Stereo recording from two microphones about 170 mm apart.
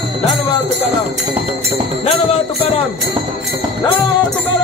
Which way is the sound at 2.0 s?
35° left (ahead or behind).